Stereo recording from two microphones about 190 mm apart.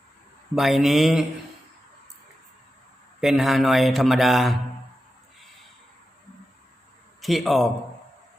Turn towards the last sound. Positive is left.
turn(degrees=0)  # may be behind; listen again after turning